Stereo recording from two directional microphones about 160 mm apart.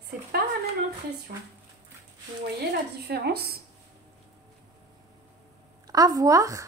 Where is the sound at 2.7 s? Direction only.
85° right.